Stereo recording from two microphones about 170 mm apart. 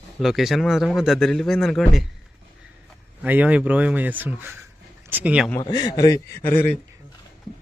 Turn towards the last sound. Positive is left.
turn(degrees=10)  # may be behind; listen again after turning